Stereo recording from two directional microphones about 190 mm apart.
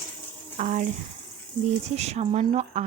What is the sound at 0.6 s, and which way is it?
Speech, 40° right (ahead or behind).